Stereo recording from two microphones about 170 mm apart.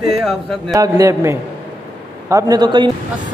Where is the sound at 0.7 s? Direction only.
20° right (ahead or behind).